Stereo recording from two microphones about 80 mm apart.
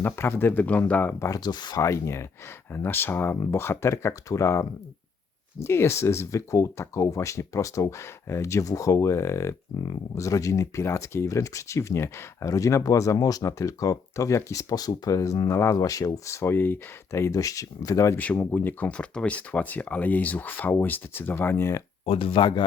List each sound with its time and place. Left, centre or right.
0.0 s speech: left
1.5 s speech: left
1.8 s speech: left
18.5 s speech: left
22.4 s speech: left